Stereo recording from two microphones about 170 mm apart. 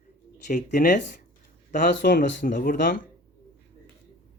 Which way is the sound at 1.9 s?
90° left.